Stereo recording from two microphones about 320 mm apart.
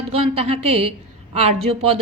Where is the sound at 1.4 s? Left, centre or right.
Right.